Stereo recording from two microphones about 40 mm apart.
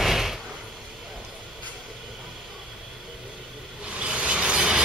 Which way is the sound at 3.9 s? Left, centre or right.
Right.